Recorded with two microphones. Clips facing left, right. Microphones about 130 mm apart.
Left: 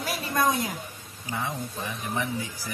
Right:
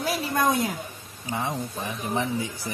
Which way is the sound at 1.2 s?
25° right (ahead or behind).